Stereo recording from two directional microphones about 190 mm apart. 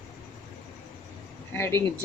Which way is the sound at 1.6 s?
15° left (ahead or behind).